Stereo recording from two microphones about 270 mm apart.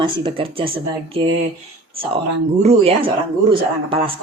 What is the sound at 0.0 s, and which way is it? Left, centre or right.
A man's voice, centre.